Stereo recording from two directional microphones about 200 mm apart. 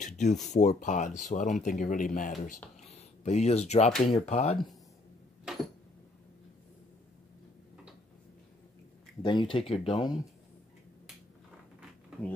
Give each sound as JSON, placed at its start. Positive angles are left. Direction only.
{"t": 0.0, "sound": "a sound", "side_deg": 40}
{"t": 0.5, "sound": "speech", "side_deg": 35}
{"t": 9.2, "sound": "speech", "side_deg": 25}